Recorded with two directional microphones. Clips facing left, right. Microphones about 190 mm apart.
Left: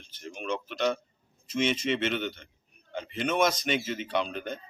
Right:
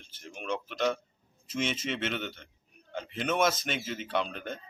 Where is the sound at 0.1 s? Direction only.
5° right (ahead or behind).